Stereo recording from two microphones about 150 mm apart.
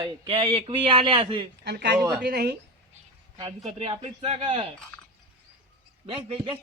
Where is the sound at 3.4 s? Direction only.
40° right (ahead or behind).